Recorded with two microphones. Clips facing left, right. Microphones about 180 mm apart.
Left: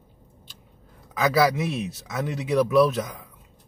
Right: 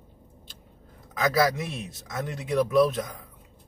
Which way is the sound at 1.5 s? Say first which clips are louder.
Left 6 dB; 5° left (ahead or behind).